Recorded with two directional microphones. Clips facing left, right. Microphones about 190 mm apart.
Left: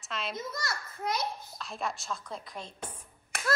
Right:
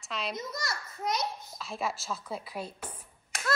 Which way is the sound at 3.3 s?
60° left (ahead or behind).